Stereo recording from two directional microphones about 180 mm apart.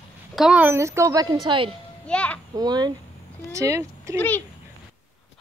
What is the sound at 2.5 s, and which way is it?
Speech, 20° right (ahead or behind).